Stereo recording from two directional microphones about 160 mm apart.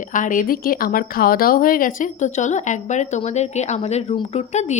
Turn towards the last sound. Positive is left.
turn(degrees=45)  # may be behind; listen again after turning